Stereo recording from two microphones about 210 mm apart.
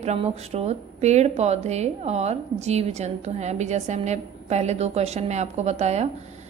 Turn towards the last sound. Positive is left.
turn(degrees=-30)  # may be behind; listen again after turning